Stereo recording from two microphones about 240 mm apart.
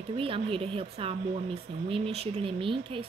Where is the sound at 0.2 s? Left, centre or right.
Right.